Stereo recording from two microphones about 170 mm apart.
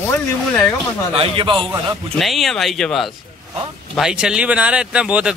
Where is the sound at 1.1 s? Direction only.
35° right (ahead or behind).